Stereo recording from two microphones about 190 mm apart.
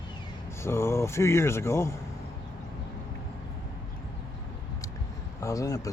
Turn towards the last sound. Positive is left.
turn(degrees=15)  # may be behind; listen again after turning